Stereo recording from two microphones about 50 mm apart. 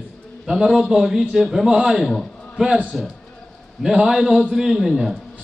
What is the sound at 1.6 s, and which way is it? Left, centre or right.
Speech, centre.